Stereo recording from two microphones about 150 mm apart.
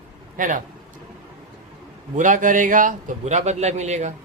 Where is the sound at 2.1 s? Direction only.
60° right (ahead or behind).